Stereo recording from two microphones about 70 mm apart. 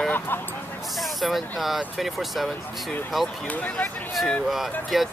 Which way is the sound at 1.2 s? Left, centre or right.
Centre.